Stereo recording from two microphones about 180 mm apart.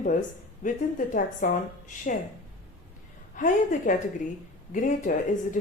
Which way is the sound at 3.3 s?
45° left (ahead or behind).